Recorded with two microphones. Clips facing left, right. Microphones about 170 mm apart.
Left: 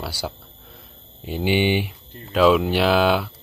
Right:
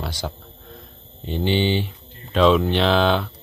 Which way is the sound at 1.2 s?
10° left (ahead or behind).